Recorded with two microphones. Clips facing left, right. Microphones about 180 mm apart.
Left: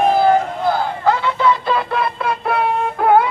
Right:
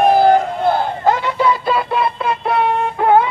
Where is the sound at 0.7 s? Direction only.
15° right (ahead or behind).